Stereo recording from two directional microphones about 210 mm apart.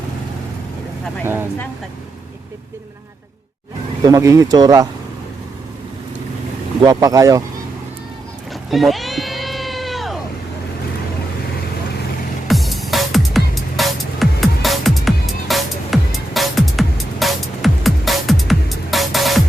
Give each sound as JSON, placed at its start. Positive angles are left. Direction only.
{"t": 1.2, "sound": "speech", "side_deg": -10}
{"t": 4.0, "sound": "speech", "side_deg": -15}
{"t": 6.8, "sound": "speech", "side_deg": -15}
{"t": 8.7, "sound": "cat", "side_deg": 0}
{"t": 12.5, "sound": "music", "side_deg": 0}